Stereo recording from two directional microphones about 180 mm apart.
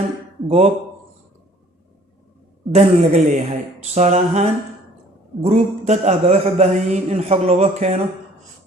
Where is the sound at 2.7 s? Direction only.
35° right (ahead or behind).